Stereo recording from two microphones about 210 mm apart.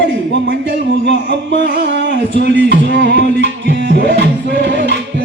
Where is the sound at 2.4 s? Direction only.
55° right (ahead or behind).